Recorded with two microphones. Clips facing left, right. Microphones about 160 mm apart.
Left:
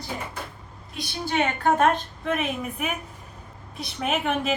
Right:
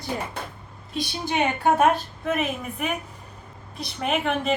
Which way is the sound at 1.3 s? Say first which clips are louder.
Right 1 dB; 15° right (ahead or behind).